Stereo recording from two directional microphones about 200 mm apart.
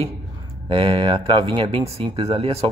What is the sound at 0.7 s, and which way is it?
Speech, 25° right (ahead or behind).